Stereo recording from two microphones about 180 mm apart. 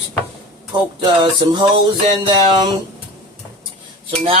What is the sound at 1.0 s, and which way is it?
Music, 25° right (ahead or behind).